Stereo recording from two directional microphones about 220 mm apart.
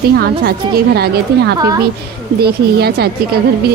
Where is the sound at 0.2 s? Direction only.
45° right (ahead or behind).